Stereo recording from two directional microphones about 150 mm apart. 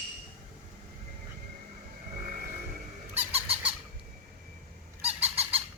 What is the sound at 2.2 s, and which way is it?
Vehicle, 70° right (ahead or behind).